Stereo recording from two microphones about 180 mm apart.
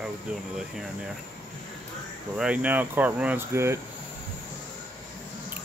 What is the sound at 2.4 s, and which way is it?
Speech, 5° right (ahead or behind).